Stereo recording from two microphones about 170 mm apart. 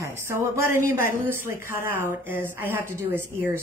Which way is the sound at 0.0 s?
15° right (ahead or behind).